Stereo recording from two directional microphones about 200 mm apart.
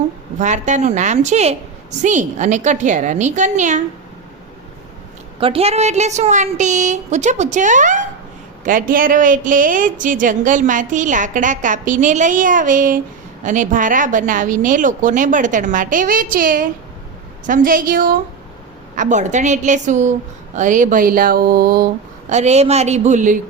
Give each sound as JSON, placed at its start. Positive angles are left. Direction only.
{"t": 0.3, "sound": "a woman's voice", "side_deg": -35}
{"t": 5.4, "sound": "a woman's voice", "side_deg": -30}
{"t": 17.4, "sound": "a sound", "side_deg": -45}
{"t": 18.9, "sound": "a woman's voice", "side_deg": -35}
{"t": 20.6, "sound": "a sound", "side_deg": -40}
{"t": 22.3, "sound": "a woman's voice", "side_deg": -35}